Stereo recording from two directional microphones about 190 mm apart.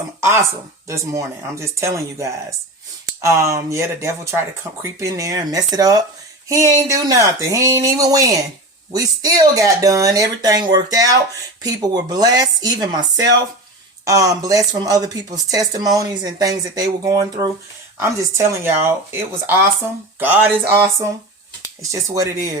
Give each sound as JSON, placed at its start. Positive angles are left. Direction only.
{"t": 0.9, "sound": "speech", "side_deg": -15}
{"t": 14.0, "sound": "speech", "side_deg": -15}